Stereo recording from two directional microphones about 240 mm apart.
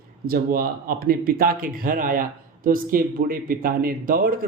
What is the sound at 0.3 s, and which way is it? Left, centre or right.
Speech, right.